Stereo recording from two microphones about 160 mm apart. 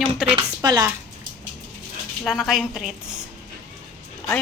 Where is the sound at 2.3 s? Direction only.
Centre (ahead or behind).